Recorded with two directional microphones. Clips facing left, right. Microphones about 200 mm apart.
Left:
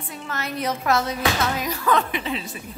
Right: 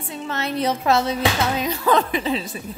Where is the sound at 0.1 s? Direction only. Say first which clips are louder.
Right 5 dB; 25° right (ahead or behind).